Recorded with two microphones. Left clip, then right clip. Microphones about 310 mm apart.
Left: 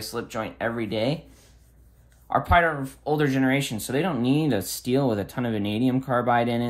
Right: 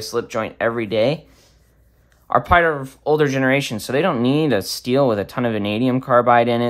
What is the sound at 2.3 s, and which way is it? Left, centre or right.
Speech, right.